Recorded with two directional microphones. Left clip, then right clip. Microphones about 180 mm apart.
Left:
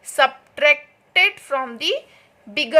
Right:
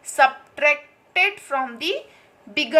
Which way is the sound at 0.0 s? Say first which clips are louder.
Even; 45° left (ahead or behind).